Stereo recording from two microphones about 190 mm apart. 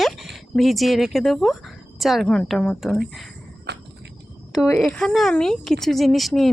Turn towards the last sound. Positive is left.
turn(degrees=0)  # may be behind; listen again after turning